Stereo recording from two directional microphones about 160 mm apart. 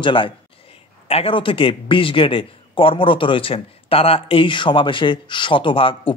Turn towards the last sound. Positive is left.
turn(degrees=35)  # may be behind; listen again after turning